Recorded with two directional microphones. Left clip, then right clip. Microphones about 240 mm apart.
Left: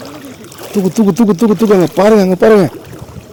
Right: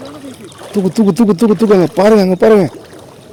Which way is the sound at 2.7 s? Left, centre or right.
Left.